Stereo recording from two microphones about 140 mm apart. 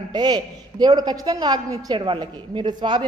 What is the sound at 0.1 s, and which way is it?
A woman's voice, 30° right (ahead or behind).